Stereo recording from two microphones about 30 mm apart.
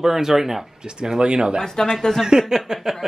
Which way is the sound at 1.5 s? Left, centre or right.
Centre.